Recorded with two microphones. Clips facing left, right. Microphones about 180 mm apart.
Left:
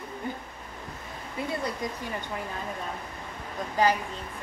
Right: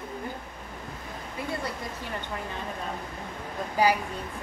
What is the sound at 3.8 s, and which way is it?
Speech, 10° right (ahead or behind).